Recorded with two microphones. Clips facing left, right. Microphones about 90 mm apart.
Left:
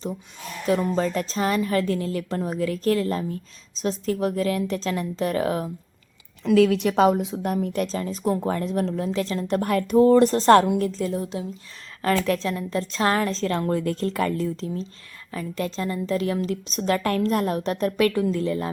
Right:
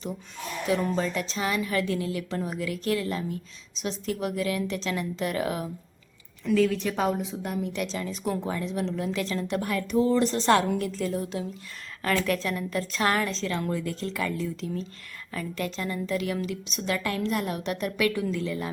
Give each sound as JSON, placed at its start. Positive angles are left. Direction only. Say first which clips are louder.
{"t": 0.9, "sound": "a woman's voice", "louder": "left 4 dB", "side_deg": 40}
{"t": 6.4, "sound": "a woman's voice", "louder": "left 5 dB", "side_deg": 90}
{"t": 7.2, "sound": "speech", "louder": "left 5 dB", "side_deg": 60}
{"t": 8.4, "sound": "a woman's voice", "louder": "left 5 dB", "side_deg": 45}
{"t": 9.6, "sound": "speech", "louder": "left 8 dB", "side_deg": 45}
{"t": 10.8, "sound": "a woman's voice", "louder": "left 4 dB", "side_deg": 30}